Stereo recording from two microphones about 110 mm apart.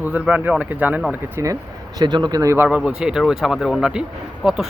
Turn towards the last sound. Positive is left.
turn(degrees=0)  # may be behind; listen again after turning